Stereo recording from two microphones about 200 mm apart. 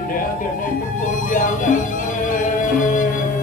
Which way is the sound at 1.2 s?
40° left (ahead or behind).